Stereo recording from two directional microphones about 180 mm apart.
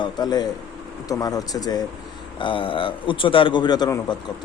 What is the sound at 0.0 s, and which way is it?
A man's voice, 20° left (ahead or behind).